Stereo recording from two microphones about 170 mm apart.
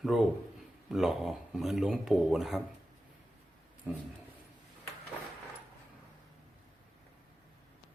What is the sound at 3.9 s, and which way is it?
Speech, 10° right (ahead or behind).